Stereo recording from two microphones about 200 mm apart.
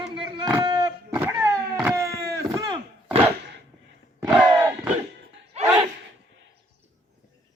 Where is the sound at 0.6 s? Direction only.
20° right (ahead or behind).